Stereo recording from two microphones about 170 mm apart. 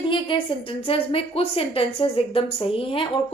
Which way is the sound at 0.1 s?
30° left (ahead or behind).